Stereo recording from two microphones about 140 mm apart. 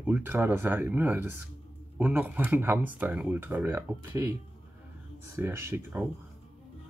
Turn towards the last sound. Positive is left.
turn(degrees=-15)  # may be behind; listen again after turning